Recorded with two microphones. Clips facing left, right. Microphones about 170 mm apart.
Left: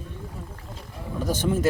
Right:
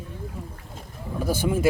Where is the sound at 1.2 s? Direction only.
10° right (ahead or behind).